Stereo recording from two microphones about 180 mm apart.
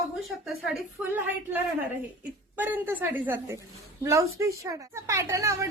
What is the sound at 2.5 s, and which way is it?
A woman's voice, 10° right (ahead or behind).